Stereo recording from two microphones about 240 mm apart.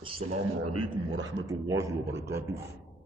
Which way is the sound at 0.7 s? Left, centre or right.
Right.